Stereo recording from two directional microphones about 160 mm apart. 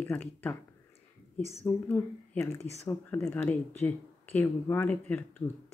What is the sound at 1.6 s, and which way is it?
Speech, 10° left (ahead or behind).